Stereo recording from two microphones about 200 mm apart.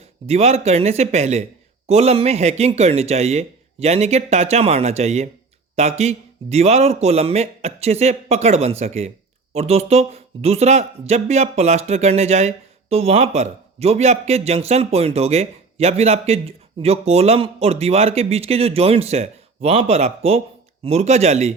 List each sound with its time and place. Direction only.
0.3 s speech: 30° right (ahead or behind)